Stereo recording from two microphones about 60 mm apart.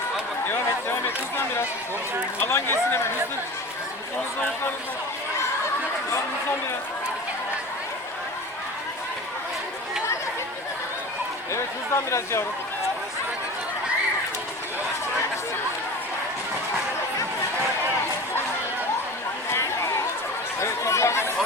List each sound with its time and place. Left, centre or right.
0.4 s chatter: left
2.4 s speech: left
11.5 s speech: left
19.5 s a sound: left
20.6 s chatter: left